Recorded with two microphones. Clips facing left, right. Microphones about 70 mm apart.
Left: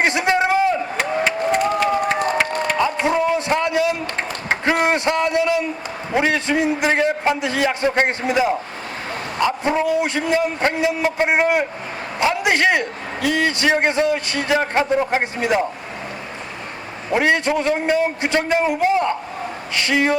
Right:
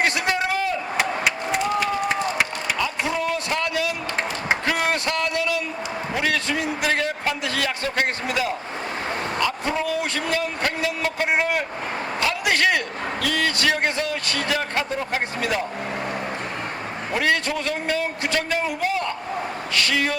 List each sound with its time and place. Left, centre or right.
0.0 s a sound: left
2.7 s music: left
4.6 s a man's voice: left
12.2 s a sound: left
13.2 s a man's voice: left
17.1 s a man's voice: left